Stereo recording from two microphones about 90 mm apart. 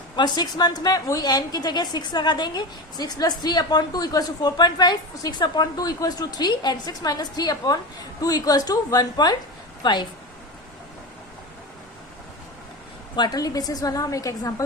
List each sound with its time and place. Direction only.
0.3 s a woman's voice: 50° left (ahead or behind)
13.1 s a woman's voice: 50° left (ahead or behind)